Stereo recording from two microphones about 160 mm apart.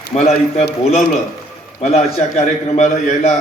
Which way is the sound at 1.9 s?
40° left (ahead or behind).